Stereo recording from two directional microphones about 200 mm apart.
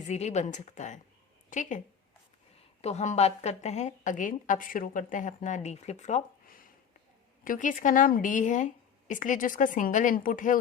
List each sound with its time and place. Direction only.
0.0 s a woman's voice: 35° left (ahead or behind)
2.8 s a woman's voice: 35° left (ahead or behind)